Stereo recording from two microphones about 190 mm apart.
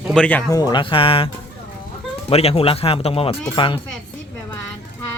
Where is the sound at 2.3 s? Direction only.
30° left (ahead or behind).